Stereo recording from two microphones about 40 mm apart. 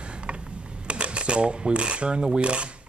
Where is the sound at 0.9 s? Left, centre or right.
Right.